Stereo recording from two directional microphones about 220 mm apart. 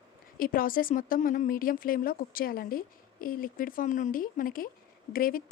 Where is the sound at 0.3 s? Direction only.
40° left (ahead or behind).